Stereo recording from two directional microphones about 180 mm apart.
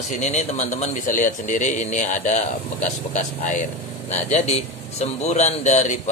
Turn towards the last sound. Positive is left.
turn(degrees=40)  # may be behind; listen again after turning